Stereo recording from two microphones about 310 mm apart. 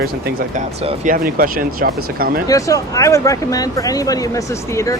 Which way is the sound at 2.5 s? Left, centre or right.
Centre.